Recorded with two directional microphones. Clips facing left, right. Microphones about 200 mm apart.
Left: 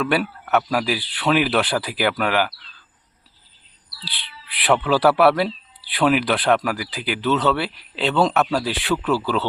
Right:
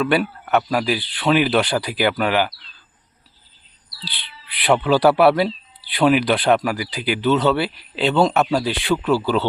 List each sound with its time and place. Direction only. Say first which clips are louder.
0.0 s speech: right 2 dB; 5° left (ahead or behind)
4.6 s speech: right 2 dB; centre (ahead or behind)